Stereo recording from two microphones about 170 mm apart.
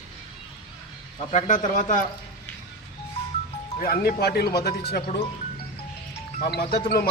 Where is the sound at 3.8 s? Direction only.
60° left (ahead or behind).